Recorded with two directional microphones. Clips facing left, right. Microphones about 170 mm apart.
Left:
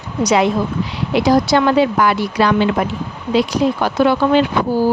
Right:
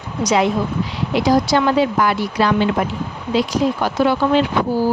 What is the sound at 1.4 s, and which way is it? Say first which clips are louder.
Speech: left 2 dB; 65° left (ahead or behind).